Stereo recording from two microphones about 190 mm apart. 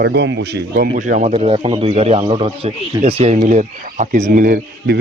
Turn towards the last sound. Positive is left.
turn(degrees=-45)  # may be behind; listen again after turning